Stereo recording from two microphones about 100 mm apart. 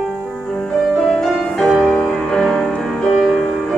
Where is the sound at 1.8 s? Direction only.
5° left (ahead or behind).